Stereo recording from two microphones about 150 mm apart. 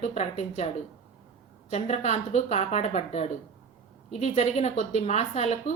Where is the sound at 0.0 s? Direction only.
45° left (ahead or behind).